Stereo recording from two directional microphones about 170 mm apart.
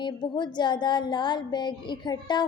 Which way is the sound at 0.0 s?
25° left (ahead or behind).